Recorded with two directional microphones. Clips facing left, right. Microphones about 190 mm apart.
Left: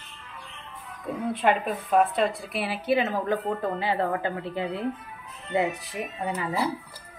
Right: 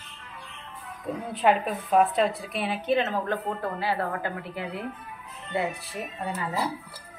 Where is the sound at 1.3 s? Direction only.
Centre (ahead or behind); by 6.0 s 15° left (ahead or behind).